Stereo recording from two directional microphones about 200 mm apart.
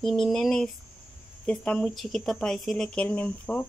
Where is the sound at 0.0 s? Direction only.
Centre (ahead or behind).